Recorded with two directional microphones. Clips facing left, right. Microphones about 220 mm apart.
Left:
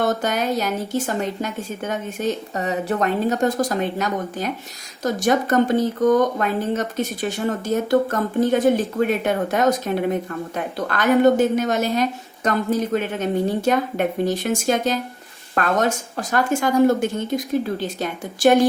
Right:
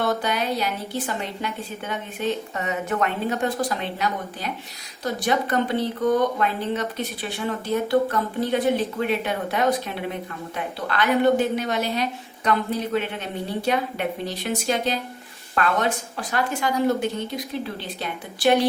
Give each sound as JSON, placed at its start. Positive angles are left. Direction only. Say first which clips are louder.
{"t": 0.0, "sound": "speech", "louder": "left 3 dB", "side_deg": 45}